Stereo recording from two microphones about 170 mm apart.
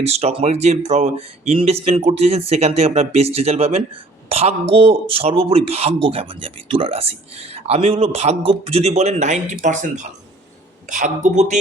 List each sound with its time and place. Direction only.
0.0 s a man's voice: 40° right (ahead or behind)